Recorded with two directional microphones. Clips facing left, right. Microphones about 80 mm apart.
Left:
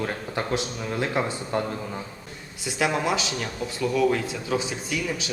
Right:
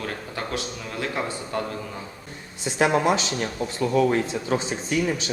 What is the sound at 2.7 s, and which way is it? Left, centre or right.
Speech, right.